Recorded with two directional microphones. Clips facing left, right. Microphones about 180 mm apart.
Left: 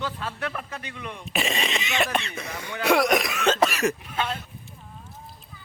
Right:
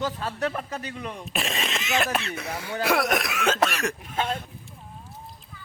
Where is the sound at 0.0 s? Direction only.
40° right (ahead or behind).